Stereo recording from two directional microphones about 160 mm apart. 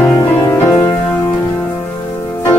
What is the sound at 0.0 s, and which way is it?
Music, 20° left (ahead or behind).